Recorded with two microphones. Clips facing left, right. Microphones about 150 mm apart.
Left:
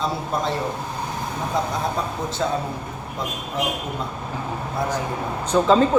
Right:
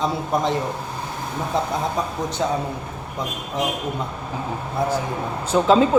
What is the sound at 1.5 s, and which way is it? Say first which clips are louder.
Speech: right 1 dB; 25° right (ahead or behind).